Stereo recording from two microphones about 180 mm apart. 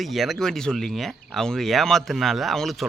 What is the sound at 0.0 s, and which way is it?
Speech, centre (ahead or behind).